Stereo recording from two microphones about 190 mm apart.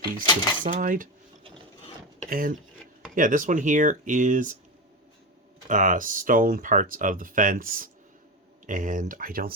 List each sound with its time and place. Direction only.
0.0 s speech: 20° left (ahead or behind)
0.6 s speech: 45° right (ahead or behind)
2.3 s speech: 50° right (ahead or behind)
5.6 s speech: 45° right (ahead or behind)